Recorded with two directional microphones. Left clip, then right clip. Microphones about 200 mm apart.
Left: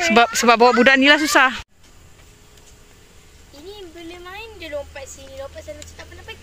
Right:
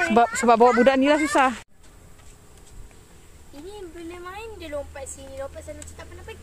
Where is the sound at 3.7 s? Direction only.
60° right (ahead or behind).